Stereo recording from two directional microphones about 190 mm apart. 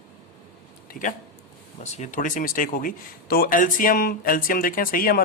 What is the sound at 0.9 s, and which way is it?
Speech, 45° left (ahead or behind).